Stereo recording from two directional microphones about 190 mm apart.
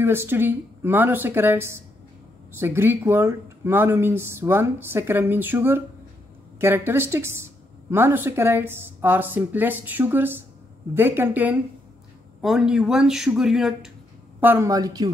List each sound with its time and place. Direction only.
0.0 s speech: 10° right (ahead or behind)
14.4 s speech: 15° right (ahead or behind)